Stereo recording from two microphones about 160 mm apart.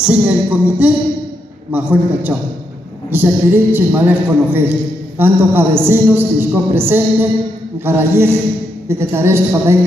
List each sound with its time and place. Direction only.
0.0 s a man's voice: 5° right (ahead or behind)